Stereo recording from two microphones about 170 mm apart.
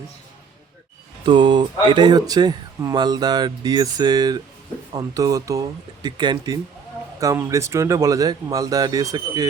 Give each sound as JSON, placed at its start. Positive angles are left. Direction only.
{"t": 1.2, "sound": "speech", "side_deg": -25}